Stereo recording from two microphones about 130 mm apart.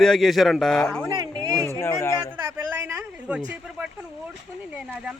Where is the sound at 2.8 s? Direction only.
10° right (ahead or behind).